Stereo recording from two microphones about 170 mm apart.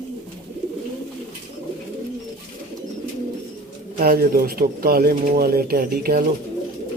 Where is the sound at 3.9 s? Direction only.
60° right (ahead or behind).